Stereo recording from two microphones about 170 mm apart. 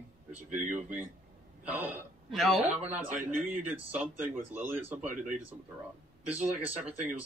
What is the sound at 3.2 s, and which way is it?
Speech, 50° right (ahead or behind).